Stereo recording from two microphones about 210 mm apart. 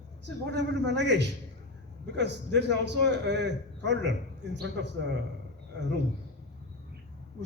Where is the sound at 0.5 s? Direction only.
55° right (ahead or behind).